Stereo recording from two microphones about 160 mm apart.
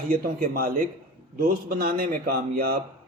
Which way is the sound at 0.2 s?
70° right (ahead or behind).